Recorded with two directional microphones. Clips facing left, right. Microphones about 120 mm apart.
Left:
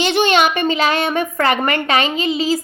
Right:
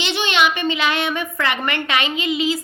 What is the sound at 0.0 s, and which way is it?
A woman's voice, 45° left (ahead or behind).